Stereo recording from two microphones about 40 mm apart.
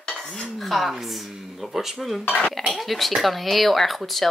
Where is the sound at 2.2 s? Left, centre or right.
Left.